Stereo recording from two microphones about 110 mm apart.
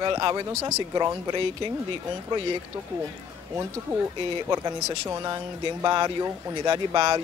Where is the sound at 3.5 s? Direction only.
25° right (ahead or behind).